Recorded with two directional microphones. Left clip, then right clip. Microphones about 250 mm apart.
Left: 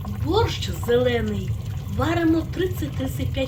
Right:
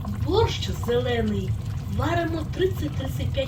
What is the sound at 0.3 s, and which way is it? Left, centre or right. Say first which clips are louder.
Speech: left 1 dB; centre.